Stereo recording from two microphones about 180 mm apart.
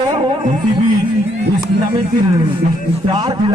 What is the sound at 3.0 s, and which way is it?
Speech, 25° right (ahead or behind).